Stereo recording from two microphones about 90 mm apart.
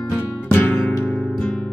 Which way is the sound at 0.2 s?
20° left (ahead or behind).